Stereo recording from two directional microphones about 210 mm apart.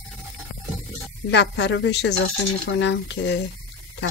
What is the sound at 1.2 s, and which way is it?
Speech, 55° left (ahead or behind).